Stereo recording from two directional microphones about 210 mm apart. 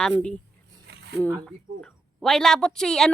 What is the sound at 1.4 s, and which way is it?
A woman's voice, 5° left (ahead or behind).